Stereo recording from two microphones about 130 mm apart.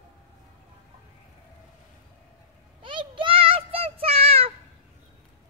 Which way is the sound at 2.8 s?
40° right (ahead or behind).